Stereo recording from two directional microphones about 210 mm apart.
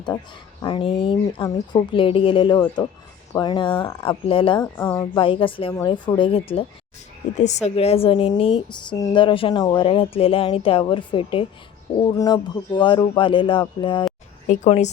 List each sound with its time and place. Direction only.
0.6 s a woman's voice: 25° left (ahead or behind)
4.6 s a woman's voice: 10° left (ahead or behind)
5.1 s a woman's voice: 25° left (ahead or behind)
14.4 s speech: 35° left (ahead or behind)